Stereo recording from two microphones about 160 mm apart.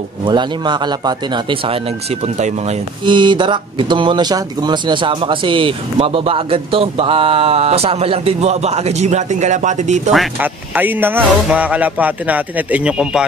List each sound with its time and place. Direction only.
0.2 s speech: 30° right (ahead or behind)
3.1 s speech: 30° right (ahead or behind); by 10.1 s 50° right (ahead or behind)
10.4 s speech: 10° right (ahead or behind)